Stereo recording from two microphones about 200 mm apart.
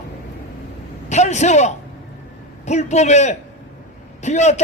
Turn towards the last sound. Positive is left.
turn(degrees=35)  # may be behind; listen again after turning